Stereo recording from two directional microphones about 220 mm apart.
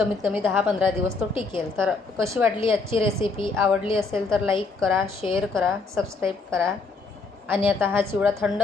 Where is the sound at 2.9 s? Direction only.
25° left (ahead or behind).